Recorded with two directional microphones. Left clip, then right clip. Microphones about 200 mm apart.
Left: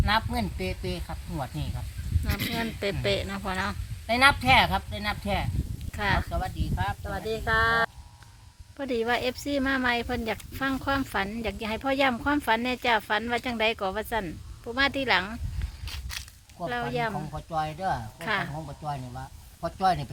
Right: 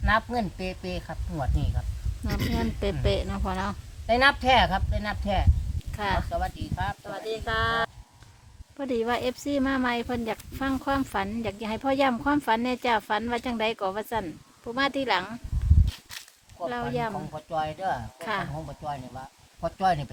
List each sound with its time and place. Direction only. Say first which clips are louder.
0.0 s speech: right 1 dB; 5° right (ahead or behind)
2.6 s speech: even; 10° right (ahead or behind)
7.0 s speech: left 1 dB; 40° left (ahead or behind)
8.8 s speech: even; 10° right (ahead or behind)
15.9 s a sound: left 3 dB; 25° left (ahead or behind)
16.6 s speech: even; 10° right (ahead or behind)